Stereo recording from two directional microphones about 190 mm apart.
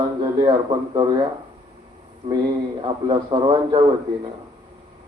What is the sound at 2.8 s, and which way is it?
Speech, 25° right (ahead or behind).